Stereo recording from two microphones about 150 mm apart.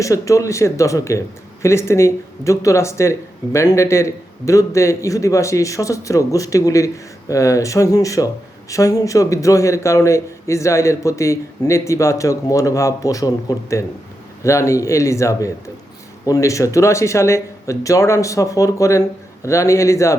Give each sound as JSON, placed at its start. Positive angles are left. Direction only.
{"t": 0.0, "sound": "speech", "side_deg": 20}